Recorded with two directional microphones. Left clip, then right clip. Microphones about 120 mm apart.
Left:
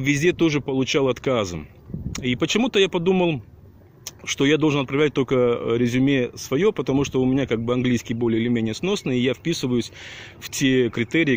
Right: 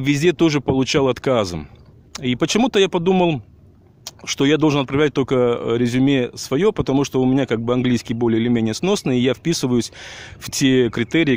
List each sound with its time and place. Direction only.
0.0 s speech: 40° right (ahead or behind)
4.4 s speech: 40° right (ahead or behind)